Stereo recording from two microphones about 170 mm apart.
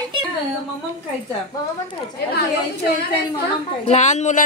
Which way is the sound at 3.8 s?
40° left (ahead or behind).